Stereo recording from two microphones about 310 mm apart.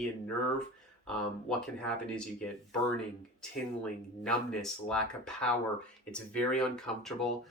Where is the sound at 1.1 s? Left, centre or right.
Centre.